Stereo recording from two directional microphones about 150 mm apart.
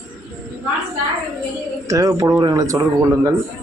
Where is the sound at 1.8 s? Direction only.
20° right (ahead or behind).